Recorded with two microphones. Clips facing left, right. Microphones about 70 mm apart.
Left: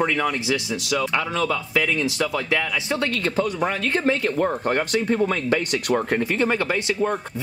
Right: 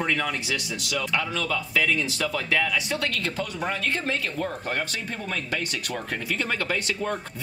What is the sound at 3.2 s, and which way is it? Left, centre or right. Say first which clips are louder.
Speech: left 6 dB; left.